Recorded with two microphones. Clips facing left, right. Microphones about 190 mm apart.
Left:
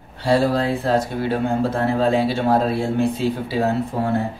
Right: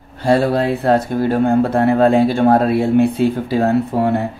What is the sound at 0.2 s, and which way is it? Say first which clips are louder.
Speech: right 3 dB; 55° right (ahead or behind).